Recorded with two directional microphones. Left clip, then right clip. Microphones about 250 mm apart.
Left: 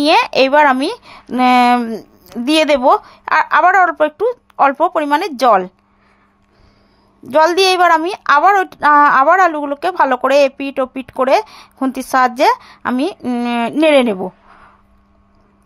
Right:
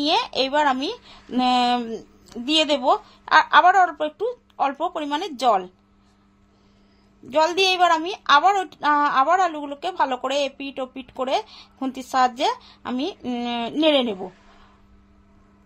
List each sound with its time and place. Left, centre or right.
0.0 s a woman's voice: left
7.2 s a woman's voice: left